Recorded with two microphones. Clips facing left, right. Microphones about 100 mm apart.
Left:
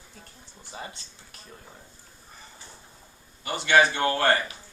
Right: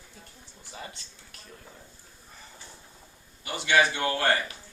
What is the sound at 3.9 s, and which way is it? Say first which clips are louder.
Speech: left 3 dB; 45° left (ahead or behind).